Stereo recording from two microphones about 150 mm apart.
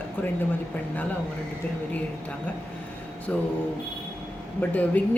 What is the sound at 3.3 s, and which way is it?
Speech, 10° left (ahead or behind).